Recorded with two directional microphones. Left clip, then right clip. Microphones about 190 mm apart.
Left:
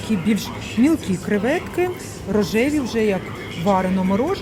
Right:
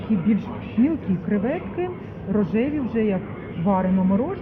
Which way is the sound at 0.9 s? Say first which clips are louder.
Left 5 dB; 30° left (ahead or behind).